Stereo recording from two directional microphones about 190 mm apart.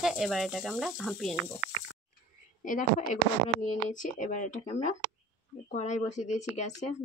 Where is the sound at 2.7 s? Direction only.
40° left (ahead or behind).